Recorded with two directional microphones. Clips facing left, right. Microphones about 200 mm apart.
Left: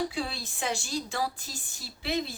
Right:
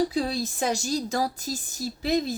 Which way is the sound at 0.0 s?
40° right (ahead or behind).